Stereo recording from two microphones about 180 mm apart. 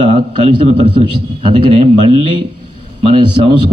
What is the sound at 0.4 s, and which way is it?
A man's voice, 25° right (ahead or behind).